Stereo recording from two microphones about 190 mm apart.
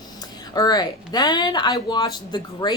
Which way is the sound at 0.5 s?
20° left (ahead or behind).